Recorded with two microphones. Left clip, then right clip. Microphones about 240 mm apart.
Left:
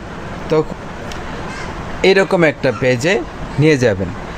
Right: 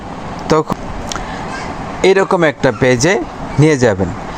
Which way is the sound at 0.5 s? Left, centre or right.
Right.